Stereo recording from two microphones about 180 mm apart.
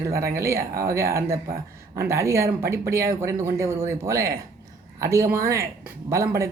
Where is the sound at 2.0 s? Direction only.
15° right (ahead or behind).